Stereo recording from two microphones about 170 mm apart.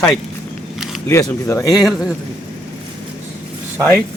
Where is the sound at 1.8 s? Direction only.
Centre (ahead or behind).